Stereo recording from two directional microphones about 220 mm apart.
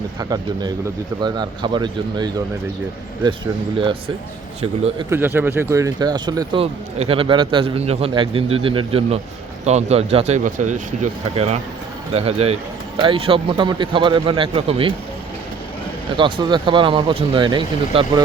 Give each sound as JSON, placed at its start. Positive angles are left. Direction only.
{"t": 0.2, "sound": "speech", "side_deg": -15}
{"t": 4.6, "sound": "speech", "side_deg": -25}
{"t": 5.1, "sound": "speech", "side_deg": -10}
{"t": 16.1, "sound": "speech", "side_deg": -20}